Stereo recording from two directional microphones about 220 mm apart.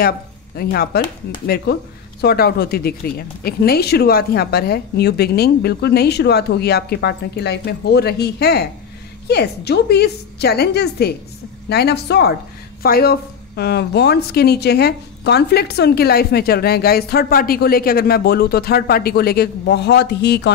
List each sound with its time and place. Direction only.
0.6 s a woman's voice: 45° left (ahead or behind)
2.2 s a woman's voice: 45° left (ahead or behind)